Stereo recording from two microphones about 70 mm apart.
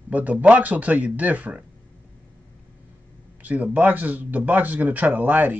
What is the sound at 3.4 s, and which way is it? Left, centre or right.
Speech, right.